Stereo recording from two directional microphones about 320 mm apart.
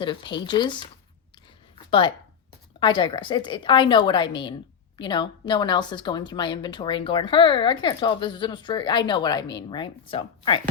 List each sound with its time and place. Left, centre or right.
0.0 s a woman's voice: centre
1.9 s a woman's voice: centre